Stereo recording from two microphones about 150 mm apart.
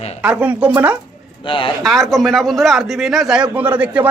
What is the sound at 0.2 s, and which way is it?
Speech, 10° right (ahead or behind).